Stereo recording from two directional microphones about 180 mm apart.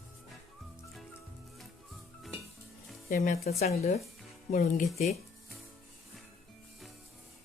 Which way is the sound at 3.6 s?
35° left (ahead or behind).